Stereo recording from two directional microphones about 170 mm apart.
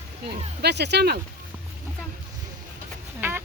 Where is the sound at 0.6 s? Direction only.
80° right.